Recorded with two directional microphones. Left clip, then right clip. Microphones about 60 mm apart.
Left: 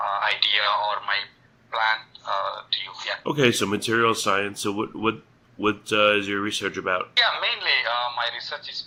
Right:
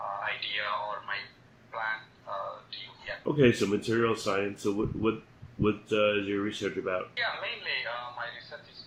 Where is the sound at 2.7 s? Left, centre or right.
Left.